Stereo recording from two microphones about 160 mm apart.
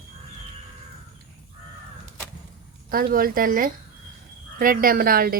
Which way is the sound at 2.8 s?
65° right (ahead or behind).